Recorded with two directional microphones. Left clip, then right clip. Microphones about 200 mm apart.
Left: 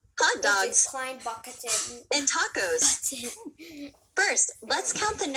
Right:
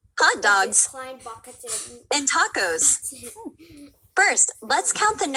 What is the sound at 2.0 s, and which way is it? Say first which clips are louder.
Speech: right 6 dB; 40° right (ahead or behind).